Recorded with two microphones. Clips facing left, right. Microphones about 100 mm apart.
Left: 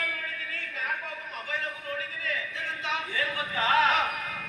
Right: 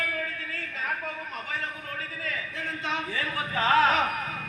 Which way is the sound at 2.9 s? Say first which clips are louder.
Even; 35° right (ahead or behind).